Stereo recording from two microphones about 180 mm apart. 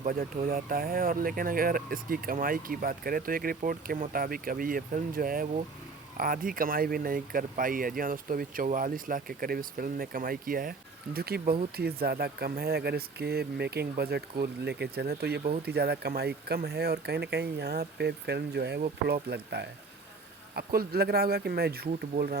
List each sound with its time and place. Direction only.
0.0 s speech: 55° right (ahead or behind)